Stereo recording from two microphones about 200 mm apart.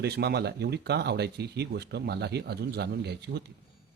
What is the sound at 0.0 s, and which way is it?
A man's voice, 55° right (ahead or behind).